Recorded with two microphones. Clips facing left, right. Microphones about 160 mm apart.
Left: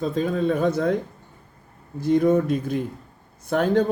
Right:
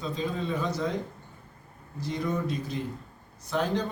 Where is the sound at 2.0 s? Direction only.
50° left (ahead or behind).